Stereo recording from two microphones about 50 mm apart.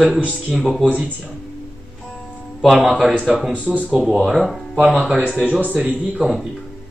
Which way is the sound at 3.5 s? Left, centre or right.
Right.